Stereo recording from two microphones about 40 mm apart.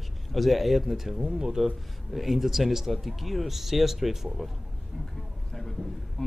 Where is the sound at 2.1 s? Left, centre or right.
Centre.